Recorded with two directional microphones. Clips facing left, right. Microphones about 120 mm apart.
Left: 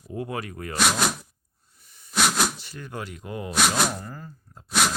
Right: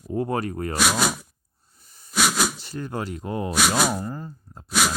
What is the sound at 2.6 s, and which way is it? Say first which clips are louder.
Speech: right 6 dB; 35° right (ahead or behind).